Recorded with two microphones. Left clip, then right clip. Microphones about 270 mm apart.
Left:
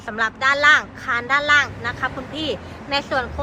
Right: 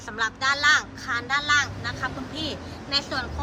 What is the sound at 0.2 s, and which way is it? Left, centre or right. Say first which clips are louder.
Speech: left 6 dB; centre.